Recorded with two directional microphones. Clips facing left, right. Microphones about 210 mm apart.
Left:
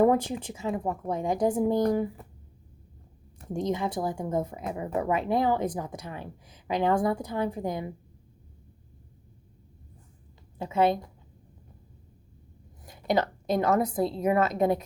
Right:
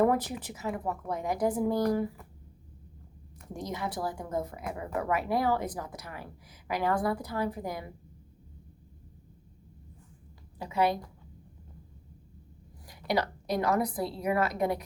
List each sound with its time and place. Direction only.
0.0 s speech: 25° left (ahead or behind)
3.5 s speech: 25° left (ahead or behind)
10.6 s speech: 25° left (ahead or behind)
12.8 s a woman's voice: 20° left (ahead or behind)